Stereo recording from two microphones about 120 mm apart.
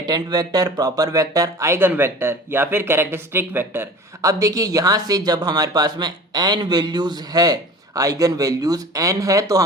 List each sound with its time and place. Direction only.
0.0 s speech: 35° right (ahead or behind)